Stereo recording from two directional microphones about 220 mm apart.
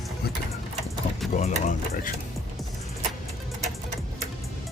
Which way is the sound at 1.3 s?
30° left (ahead or behind).